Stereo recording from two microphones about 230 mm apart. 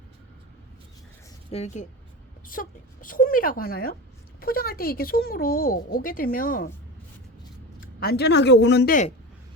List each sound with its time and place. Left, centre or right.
1.5 s a woman's voice: left
7.8 s speech: left